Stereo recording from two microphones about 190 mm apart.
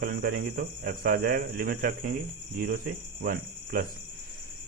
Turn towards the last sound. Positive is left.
turn(degrees=-50)  # may be behind; listen again after turning